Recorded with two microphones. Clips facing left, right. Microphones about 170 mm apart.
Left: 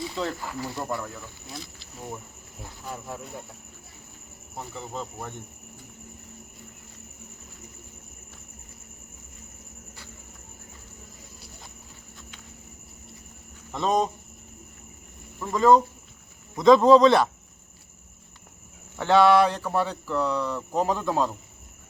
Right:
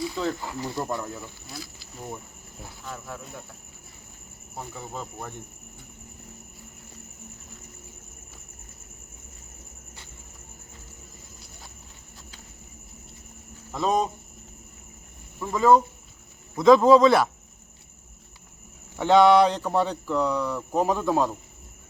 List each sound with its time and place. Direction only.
0.3 s speech: 15° right (ahead or behind)
1.5 s speech: centre (ahead or behind)
2.8 s cricket: 15° left (ahead or behind)
4.5 s speech: 5° right (ahead or behind)
13.7 s speech: 5° right (ahead or behind)
15.4 s speech: 5° right (ahead or behind)
18.9 s speech: 15° right (ahead or behind)